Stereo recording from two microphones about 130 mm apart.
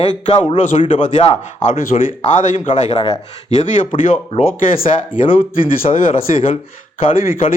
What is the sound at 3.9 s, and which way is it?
Speech, 45° left (ahead or behind).